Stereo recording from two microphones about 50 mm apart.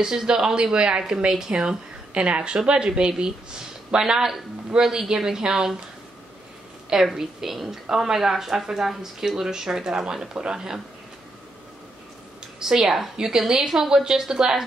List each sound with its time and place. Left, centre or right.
0.0 s a woman's voice: centre
6.9 s a woman's voice: centre
12.5 s a woman's voice: centre